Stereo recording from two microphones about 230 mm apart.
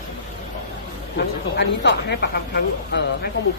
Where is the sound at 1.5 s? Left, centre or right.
Left.